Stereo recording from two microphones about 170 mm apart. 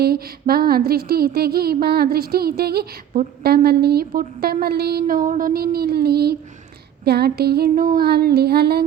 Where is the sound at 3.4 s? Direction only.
65° right (ahead or behind).